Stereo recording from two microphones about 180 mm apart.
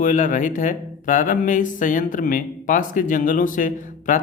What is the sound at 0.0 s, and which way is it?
Speech, 45° left (ahead or behind).